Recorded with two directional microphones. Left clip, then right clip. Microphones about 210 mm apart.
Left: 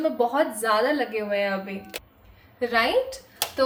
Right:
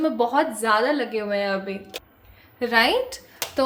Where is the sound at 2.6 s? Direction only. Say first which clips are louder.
Right 3 dB; 45° right (ahead or behind).